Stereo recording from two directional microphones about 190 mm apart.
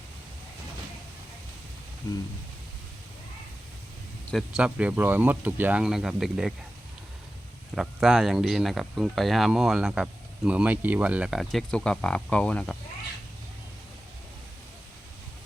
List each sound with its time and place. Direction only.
2.0 s a sound: 20° left (ahead or behind)
4.3 s speech: centre (ahead or behind)
7.8 s speech: centre (ahead or behind)